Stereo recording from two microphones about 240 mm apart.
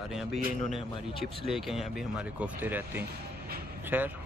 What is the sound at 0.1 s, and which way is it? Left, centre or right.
A man's voice, centre.